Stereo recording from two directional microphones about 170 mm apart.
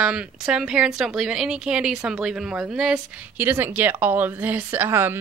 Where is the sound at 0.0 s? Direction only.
5° right (ahead or behind).